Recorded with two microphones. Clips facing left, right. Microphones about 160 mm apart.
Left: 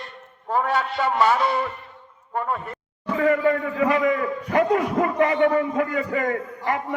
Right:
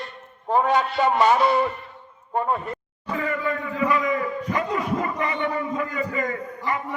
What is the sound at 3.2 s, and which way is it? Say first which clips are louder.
A man's voice: left 9 dB; 75° left (ahead or behind).